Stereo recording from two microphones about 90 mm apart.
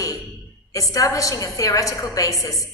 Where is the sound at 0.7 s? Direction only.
40° left (ahead or behind).